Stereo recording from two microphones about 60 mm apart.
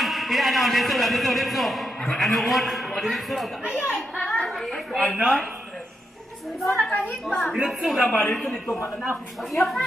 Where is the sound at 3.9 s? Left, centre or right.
Centre.